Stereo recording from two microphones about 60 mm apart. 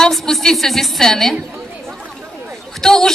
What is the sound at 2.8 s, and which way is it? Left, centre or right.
Speech, centre.